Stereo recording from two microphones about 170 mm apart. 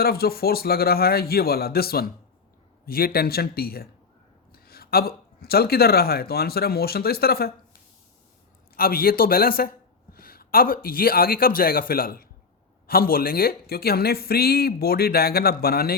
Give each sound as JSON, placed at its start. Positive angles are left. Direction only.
{"t": 0.0, "sound": "speech", "side_deg": 65}
{"t": 8.7, "sound": "a sound", "side_deg": 60}
{"t": 10.8, "sound": "speech", "side_deg": 60}